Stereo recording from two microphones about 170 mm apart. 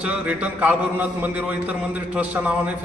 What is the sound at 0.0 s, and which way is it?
A man's voice, 10° right (ahead or behind).